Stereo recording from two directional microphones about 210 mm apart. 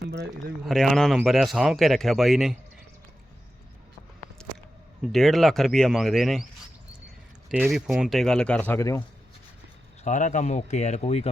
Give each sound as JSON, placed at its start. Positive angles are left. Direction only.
{"t": 0.0, "sound": "speech", "side_deg": -50}
{"t": 0.6, "sound": "speech", "side_deg": 0}
{"t": 4.4, "sound": "a sound", "side_deg": 5}
{"t": 5.0, "sound": "speech", "side_deg": 0}
{"t": 7.5, "sound": "speech", "side_deg": 0}
{"t": 10.0, "sound": "speech", "side_deg": 35}